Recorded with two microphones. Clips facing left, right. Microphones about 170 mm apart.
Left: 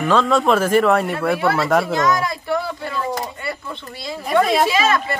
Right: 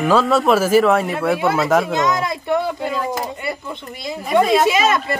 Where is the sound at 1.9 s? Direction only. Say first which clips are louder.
Even; 20° right (ahead or behind).